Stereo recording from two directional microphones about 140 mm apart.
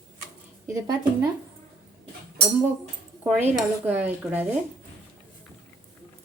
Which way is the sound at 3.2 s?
10° right (ahead or behind).